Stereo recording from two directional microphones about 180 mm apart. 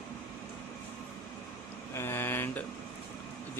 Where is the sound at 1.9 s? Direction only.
15° left (ahead or behind).